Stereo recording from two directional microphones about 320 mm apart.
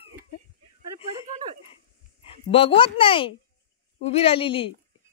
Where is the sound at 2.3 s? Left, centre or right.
Centre.